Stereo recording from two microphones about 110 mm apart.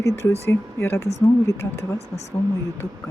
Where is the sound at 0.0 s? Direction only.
25° left (ahead or behind).